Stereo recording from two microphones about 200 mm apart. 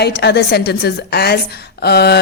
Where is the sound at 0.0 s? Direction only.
55° left (ahead or behind).